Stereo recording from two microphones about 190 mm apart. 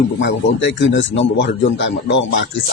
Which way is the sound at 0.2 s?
75° left (ahead or behind).